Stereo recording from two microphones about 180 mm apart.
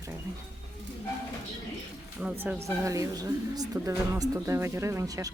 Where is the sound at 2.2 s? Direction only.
10° right (ahead or behind).